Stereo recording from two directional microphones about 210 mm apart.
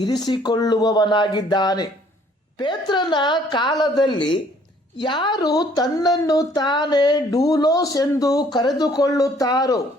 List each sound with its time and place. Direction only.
0.0 s speech: 20° left (ahead or behind)